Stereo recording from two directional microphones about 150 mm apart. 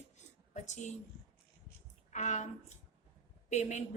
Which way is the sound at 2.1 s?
50° left (ahead or behind).